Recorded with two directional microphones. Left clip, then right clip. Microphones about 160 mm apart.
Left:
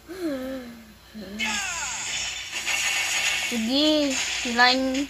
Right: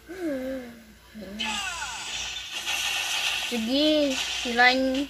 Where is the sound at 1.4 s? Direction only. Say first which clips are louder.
Left 3 dB; 35° left (ahead or behind).